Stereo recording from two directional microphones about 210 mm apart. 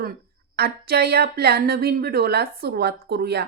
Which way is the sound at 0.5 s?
50° right (ahead or behind).